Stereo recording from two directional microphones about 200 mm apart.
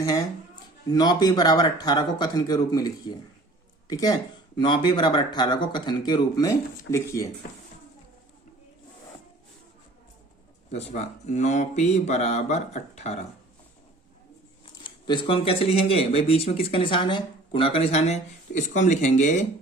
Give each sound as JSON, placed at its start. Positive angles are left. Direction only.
{"t": 0.9, "sound": "speech", "side_deg": 20}
{"t": 10.7, "sound": "speech", "side_deg": 35}
{"t": 14.6, "sound": "speech", "side_deg": 25}